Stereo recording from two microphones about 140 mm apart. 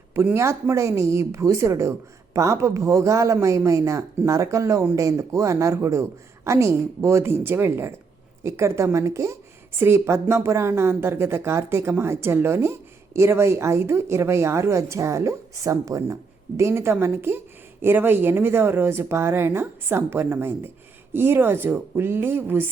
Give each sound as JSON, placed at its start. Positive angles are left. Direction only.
{"t": 0.1, "sound": "speech", "side_deg": -20}